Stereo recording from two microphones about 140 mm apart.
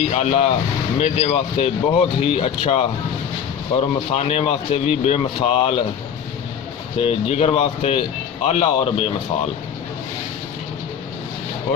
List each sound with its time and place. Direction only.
0.1 s speech: 50° left (ahead or behind)
7.0 s speech: 45° left (ahead or behind)